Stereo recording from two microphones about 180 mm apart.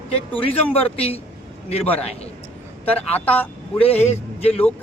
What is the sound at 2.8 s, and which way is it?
Speech, 10° left (ahead or behind).